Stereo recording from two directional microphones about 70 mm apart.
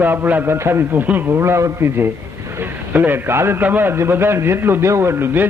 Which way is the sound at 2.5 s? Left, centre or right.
Right.